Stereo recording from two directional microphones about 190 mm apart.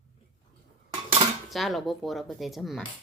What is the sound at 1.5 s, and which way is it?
Speech, centre (ahead or behind).